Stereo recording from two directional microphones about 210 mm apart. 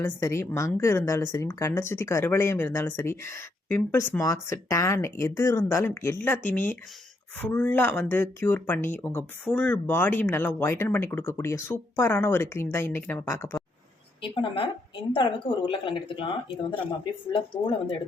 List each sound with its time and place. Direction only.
0.0 s a woman's voice: 15° left (ahead or behind)
14.2 s a woman's voice: 25° left (ahead or behind)